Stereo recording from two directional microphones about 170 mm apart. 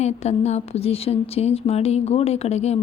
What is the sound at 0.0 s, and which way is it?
Speech, 40° left (ahead or behind).